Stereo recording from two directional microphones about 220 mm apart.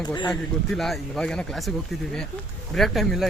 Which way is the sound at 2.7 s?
Centre (ahead or behind).